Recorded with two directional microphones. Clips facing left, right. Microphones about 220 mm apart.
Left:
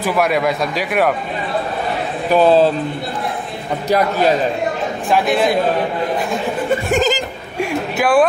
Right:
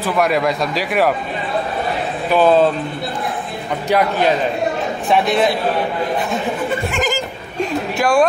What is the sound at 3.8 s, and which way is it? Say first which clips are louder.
Speech: left 1 dB; 40° left (ahead or behind).